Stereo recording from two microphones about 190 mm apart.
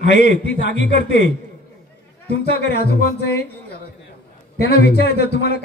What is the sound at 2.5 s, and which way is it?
Speech, 60° left (ahead or behind).